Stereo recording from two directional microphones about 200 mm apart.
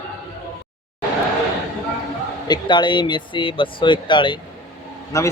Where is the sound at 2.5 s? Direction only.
25° left (ahead or behind).